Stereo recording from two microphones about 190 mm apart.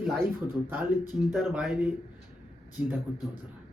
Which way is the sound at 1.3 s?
5° right (ahead or behind).